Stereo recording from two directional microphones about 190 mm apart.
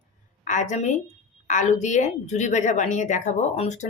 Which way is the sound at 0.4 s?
40° left (ahead or behind).